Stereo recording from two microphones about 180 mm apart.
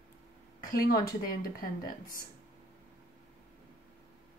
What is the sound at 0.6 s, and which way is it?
Speech, 55° left (ahead or behind).